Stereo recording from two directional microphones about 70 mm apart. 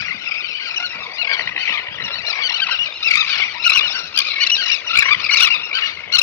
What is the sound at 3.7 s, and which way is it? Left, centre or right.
Squeal, left.